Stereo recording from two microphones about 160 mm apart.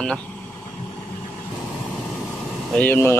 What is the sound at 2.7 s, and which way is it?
Speech, 10° left (ahead or behind).